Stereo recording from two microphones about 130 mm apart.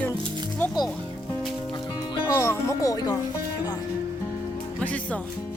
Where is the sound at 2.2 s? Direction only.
20° left (ahead or behind).